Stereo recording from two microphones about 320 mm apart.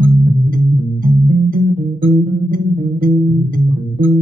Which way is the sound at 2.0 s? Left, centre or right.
Right.